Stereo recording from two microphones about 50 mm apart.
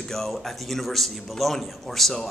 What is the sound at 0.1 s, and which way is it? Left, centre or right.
A man's voice, centre.